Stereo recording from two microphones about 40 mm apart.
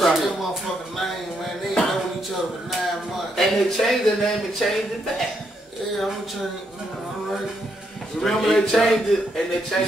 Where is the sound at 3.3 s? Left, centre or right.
Centre.